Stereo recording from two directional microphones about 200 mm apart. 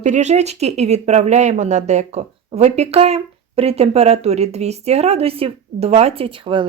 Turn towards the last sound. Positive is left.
turn(degrees=-25)  # may be behind; listen again after turning